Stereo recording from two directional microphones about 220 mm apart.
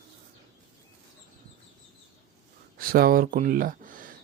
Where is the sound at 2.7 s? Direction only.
40° right (ahead or behind).